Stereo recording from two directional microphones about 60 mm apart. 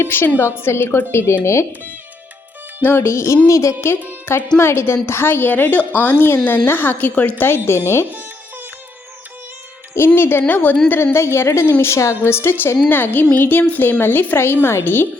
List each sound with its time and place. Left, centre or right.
0.0 s a woman's voice: left
2.8 s a woman's voice: left
3.4 s speech: left
4.3 s a woman's voice: left
10.2 s a woman's voice: left
10.4 s a woman's voice: left
11.1 s a woman's voice: left